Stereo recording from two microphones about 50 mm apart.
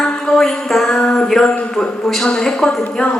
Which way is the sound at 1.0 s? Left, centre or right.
Left.